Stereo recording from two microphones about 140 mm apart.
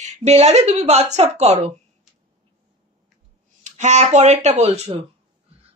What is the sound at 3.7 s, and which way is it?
A woman's voice, 60° right (ahead or behind).